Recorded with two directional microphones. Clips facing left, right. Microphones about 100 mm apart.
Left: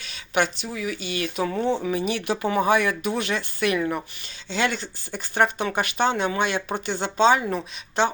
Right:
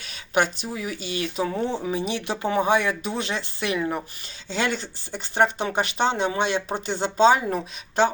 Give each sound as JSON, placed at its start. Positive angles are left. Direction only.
{"t": 0.0, "sound": "speech", "side_deg": -40}